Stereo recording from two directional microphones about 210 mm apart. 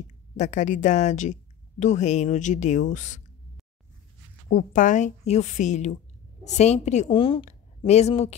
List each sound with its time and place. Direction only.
0.4 s a woman's voice: 35° left (ahead or behind)
4.5 s a woman's voice: 40° left (ahead or behind)